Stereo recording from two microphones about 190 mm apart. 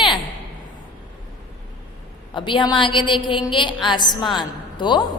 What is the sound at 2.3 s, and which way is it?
A woman's voice, 25° left (ahead or behind).